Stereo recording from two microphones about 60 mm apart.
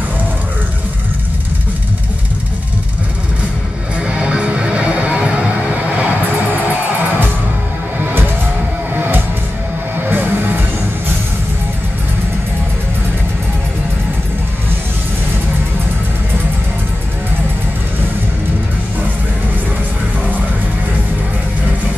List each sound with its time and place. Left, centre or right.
4.1 s music: centre
8.0 s music: right